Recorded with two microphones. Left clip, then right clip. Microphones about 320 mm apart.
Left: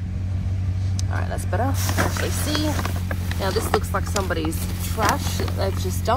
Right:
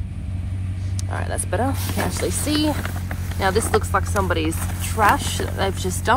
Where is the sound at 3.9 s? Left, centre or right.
Right.